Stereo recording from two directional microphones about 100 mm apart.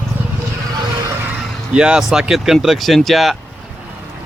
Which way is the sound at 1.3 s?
10° right (ahead or behind).